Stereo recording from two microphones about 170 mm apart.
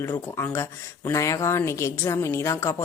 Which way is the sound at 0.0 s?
15° left (ahead or behind).